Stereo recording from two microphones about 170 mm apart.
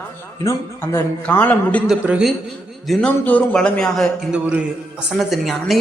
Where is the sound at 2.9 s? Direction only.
10° left (ahead or behind).